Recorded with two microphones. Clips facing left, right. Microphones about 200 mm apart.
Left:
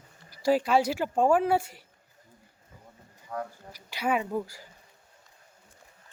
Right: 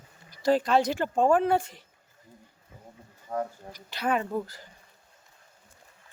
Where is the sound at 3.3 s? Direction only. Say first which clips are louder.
Right 4 dB; 30° right (ahead or behind).